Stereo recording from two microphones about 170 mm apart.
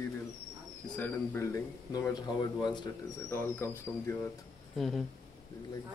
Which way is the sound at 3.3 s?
15° left (ahead or behind).